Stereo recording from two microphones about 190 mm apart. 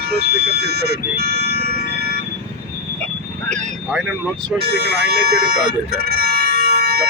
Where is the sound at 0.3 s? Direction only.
55° right (ahead or behind).